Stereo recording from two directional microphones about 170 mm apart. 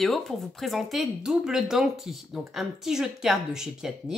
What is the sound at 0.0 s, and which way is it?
Speech, centre (ahead or behind).